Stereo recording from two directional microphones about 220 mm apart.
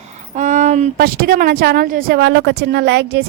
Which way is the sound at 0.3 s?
35° right (ahead or behind).